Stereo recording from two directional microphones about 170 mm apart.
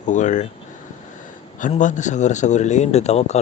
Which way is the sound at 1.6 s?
50° left (ahead or behind).